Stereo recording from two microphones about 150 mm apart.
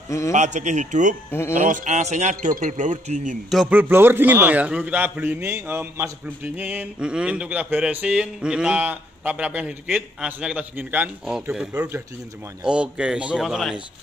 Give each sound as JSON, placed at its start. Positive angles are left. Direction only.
{"t": 0.3, "sound": "speech", "side_deg": -55}
{"t": 3.7, "sound": "a man's voice", "side_deg": -15}